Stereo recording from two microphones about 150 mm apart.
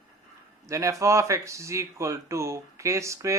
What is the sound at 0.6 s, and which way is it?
Speech, 20° right (ahead or behind).